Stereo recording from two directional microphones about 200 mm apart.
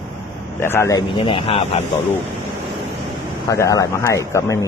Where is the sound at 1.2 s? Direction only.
25° left (ahead or behind).